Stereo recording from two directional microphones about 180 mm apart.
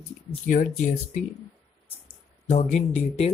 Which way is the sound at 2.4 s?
40° left (ahead or behind).